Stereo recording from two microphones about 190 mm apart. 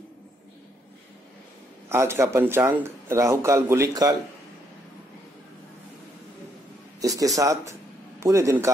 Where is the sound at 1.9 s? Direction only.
15° right (ahead or behind).